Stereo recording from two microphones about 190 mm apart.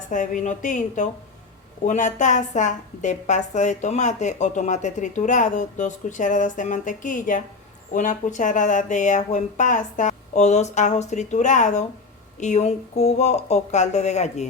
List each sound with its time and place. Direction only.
0.1 s a woman's voice: 40° left (ahead or behind)